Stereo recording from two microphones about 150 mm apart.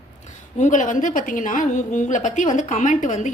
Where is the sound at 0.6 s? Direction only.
55° left (ahead or behind).